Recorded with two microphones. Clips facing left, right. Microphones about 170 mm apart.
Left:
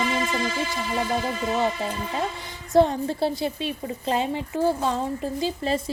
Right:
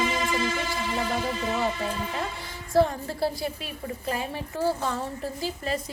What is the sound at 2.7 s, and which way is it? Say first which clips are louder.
A woman's voice: left 4 dB; 20° left (ahead or behind).